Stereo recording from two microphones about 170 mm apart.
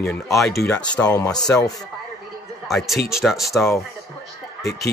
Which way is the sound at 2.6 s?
Centre (ahead or behind).